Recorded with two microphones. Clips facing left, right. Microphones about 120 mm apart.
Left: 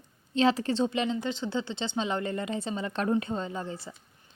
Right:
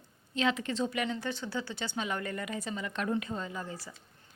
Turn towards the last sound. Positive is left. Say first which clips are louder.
# left 4 dB
turn(degrees=25)  # may be behind; listen again after turning